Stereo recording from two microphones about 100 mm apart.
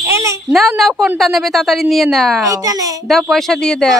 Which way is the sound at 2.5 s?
35° right (ahead or behind).